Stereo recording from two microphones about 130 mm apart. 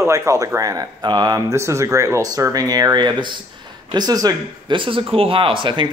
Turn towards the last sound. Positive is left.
turn(degrees=-40)  # may be behind; listen again after turning